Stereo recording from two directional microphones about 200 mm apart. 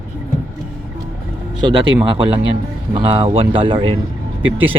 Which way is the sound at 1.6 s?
20° right (ahead or behind).